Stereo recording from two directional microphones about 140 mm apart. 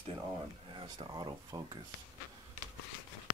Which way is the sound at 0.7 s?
30° right (ahead or behind).